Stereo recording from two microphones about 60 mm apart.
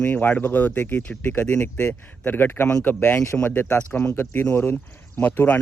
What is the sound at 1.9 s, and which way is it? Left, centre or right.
Speech, left.